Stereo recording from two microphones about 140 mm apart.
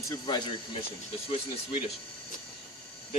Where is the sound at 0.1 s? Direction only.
30° left (ahead or behind).